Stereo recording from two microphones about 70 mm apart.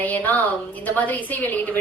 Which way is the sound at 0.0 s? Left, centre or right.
Left.